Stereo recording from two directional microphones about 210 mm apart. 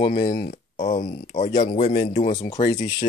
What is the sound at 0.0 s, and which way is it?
Speech, 35° left (ahead or behind).